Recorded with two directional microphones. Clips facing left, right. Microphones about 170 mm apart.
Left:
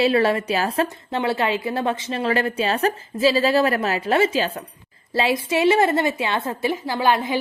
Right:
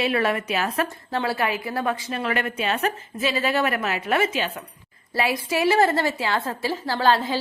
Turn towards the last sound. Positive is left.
turn(degrees=15)  # may be behind; listen again after turning